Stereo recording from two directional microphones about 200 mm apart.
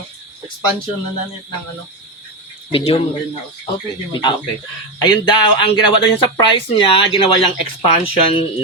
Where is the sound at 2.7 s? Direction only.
30° left (ahead or behind).